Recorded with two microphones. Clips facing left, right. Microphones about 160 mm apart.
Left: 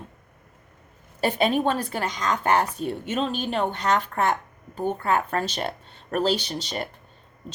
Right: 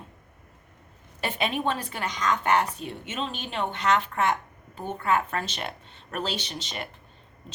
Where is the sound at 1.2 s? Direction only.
35° left (ahead or behind).